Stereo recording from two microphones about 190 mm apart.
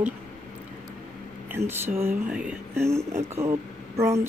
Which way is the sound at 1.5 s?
10° right (ahead or behind).